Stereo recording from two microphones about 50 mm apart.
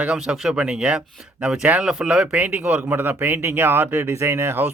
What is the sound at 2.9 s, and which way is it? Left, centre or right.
Speech, right.